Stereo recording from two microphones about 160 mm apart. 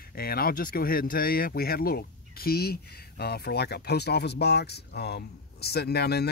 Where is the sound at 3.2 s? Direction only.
80° left.